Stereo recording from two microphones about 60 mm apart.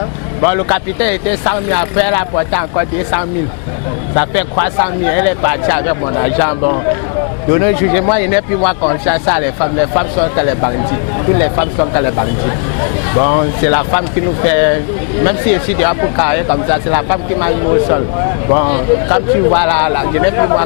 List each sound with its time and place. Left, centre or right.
0.4 s speech: left